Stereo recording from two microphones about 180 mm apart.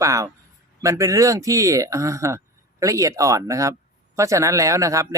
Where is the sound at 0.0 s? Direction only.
20° right (ahead or behind).